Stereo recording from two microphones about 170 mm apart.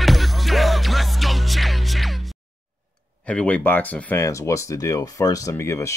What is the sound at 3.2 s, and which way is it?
Speech, 5° left (ahead or behind).